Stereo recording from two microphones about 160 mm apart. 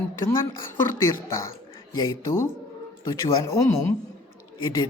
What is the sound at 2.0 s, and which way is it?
A woman's voice, 20° left (ahead or behind).